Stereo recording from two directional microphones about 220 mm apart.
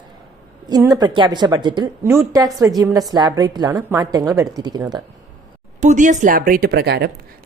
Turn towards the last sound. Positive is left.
turn(degrees=-50)  # may be behind; listen again after turning